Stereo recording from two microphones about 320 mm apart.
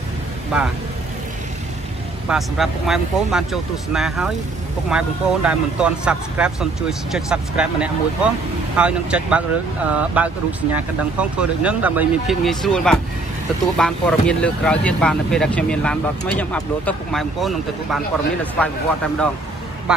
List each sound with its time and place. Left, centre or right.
0.5 s speech: centre
2.2 s speech: centre